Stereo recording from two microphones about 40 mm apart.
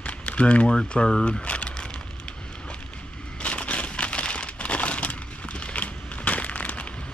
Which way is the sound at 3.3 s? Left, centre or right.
Left.